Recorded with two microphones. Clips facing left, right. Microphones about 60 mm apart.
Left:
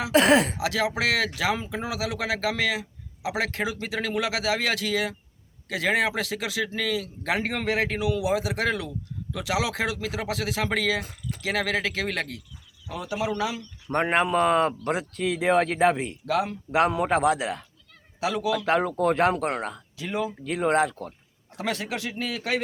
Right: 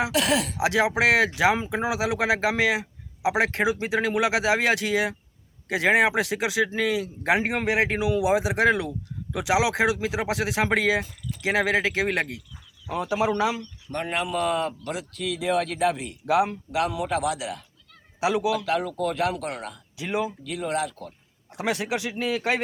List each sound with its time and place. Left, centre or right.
0.1 s speech: left
0.6 s speech: right
13.8 s speech: left
16.2 s speech: centre
16.7 s speech: left
20.0 s speech: centre
20.4 s speech: left
21.5 s speech: centre